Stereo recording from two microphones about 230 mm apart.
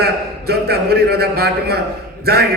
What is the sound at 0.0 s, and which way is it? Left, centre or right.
A man's voice, right.